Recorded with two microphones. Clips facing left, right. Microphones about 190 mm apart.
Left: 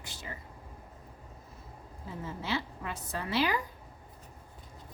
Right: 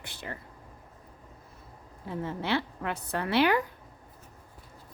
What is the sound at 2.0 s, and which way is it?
A woman's voice, 65° right (ahead or behind).